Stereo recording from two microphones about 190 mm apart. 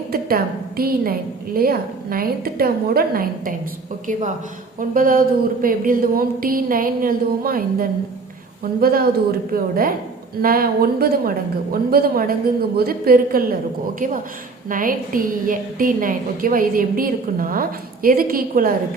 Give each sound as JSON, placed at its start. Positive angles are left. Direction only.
{"t": 0.1, "sound": "a woman's voice", "side_deg": -50}
{"t": 4.0, "sound": "a woman's voice", "side_deg": -40}
{"t": 14.7, "sound": "a woman's voice", "side_deg": -45}